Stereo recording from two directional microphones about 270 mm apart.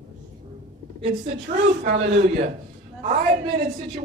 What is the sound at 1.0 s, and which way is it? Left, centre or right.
Speech, right.